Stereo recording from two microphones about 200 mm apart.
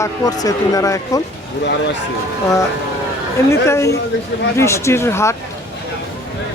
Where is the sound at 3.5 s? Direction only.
15° left (ahead or behind).